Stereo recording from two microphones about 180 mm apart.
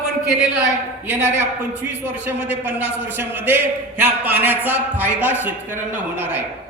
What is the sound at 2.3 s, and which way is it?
A man's voice, 10° right (ahead or behind).